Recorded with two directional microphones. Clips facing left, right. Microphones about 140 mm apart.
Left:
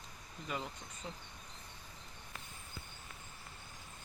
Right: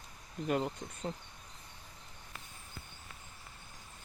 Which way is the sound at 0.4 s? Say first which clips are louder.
Right 9 dB; 50° right (ahead or behind).